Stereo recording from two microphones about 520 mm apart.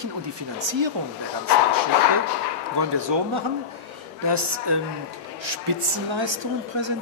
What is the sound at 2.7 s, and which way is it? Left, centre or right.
Speech, right.